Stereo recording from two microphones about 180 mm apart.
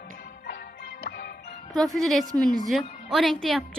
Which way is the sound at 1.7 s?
Centre (ahead or behind).